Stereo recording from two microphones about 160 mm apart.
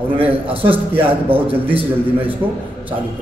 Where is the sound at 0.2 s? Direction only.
35° right (ahead or behind).